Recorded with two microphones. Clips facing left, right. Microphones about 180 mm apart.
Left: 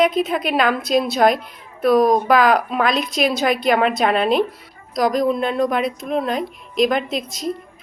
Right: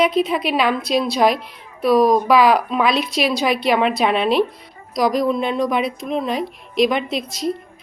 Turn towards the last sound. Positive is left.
turn(degrees=0)  # may be behind; listen again after turning